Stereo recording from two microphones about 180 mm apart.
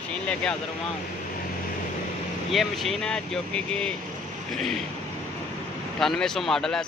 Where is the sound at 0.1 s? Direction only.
5° left (ahead or behind).